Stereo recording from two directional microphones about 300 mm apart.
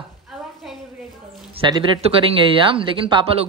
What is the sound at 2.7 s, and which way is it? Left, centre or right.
Speech, centre.